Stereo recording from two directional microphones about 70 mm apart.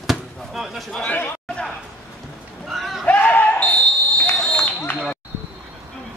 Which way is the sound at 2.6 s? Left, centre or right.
Centre.